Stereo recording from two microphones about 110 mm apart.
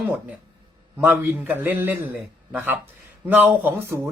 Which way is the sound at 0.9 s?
20° right (ahead or behind).